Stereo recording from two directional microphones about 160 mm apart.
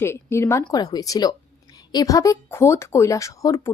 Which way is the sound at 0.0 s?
15° left (ahead or behind).